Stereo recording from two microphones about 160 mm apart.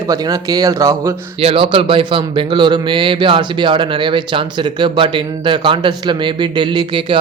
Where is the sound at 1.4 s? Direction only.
35° right (ahead or behind).